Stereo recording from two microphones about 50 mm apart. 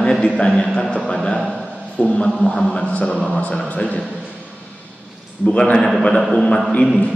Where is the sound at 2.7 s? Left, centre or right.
Left.